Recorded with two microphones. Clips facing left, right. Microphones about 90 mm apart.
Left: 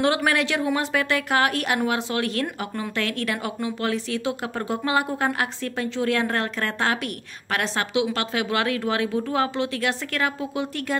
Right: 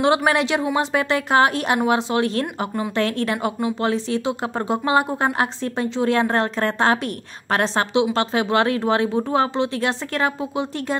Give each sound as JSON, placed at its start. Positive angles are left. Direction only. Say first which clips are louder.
{"t": 0.0, "sound": "speech", "louder": "right 4 dB", "side_deg": -25}
{"t": 3.0, "sound": "speech", "louder": "right 5 dB", "side_deg": -30}